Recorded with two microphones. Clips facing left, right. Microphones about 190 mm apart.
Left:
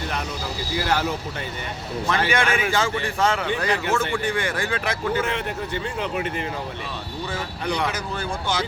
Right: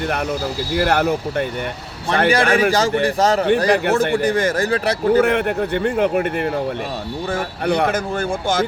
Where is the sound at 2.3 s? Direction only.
35° right (ahead or behind).